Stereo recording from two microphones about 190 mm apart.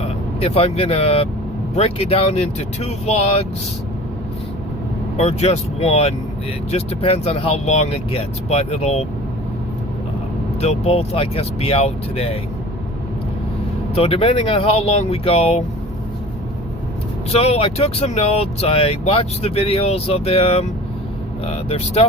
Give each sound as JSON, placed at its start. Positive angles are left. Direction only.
{"t": 0.0, "sound": "speech", "side_deg": 30}
{"t": 5.1, "sound": "speech", "side_deg": 35}
{"t": 10.6, "sound": "speech", "side_deg": 35}
{"t": 13.9, "sound": "speech", "side_deg": 30}
{"t": 17.3, "sound": "speech", "side_deg": 30}